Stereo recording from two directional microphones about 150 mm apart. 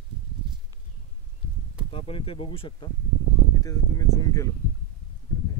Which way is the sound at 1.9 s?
40° left (ahead or behind).